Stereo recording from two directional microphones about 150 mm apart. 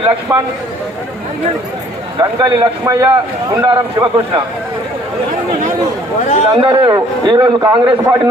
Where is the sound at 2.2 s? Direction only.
30° right (ahead or behind).